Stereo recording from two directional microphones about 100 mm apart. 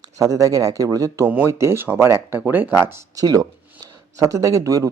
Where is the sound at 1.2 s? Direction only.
20° right (ahead or behind).